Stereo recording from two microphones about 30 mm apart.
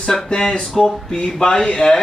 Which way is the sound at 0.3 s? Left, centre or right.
Left.